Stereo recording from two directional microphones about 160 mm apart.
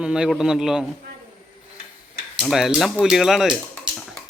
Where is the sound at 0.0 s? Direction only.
5° right (ahead or behind).